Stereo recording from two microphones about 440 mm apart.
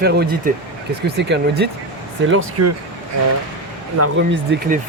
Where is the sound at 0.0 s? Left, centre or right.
Right.